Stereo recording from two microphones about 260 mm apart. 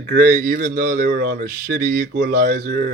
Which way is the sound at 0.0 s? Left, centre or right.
Right.